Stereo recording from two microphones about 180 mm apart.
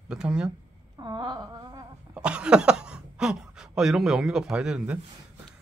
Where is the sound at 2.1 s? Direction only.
5° right (ahead or behind).